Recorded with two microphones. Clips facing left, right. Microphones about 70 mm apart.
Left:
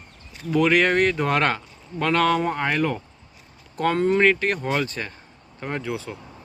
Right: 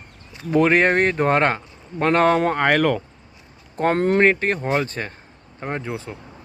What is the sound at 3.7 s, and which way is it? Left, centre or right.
Speech, right.